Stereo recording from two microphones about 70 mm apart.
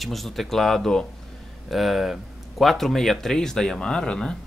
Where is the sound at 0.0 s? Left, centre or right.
Centre.